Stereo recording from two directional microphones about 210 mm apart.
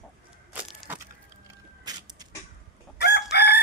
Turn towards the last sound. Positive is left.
turn(degrees=50)  # may be behind; listen again after turning